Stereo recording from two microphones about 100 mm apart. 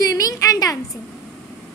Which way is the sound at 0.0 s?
35° left (ahead or behind).